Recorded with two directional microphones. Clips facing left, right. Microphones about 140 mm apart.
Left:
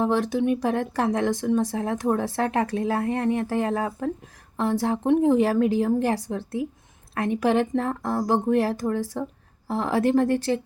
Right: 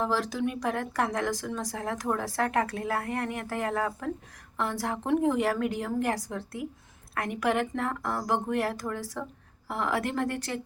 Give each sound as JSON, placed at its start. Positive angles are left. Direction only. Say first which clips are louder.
{"t": 0.0, "sound": "speech", "louder": "left 6 dB", "side_deg": 25}